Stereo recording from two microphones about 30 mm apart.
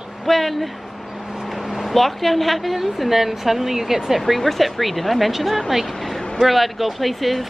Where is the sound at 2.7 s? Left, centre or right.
Centre.